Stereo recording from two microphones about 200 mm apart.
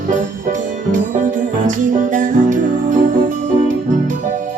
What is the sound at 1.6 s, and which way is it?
Music, 40° right (ahead or behind).